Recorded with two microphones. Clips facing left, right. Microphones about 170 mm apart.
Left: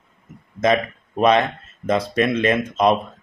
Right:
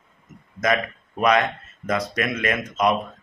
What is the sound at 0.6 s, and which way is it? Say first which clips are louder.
Speech: left 4 dB; 25° left (ahead or behind).